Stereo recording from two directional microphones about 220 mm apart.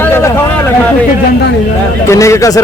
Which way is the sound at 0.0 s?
10° left (ahead or behind).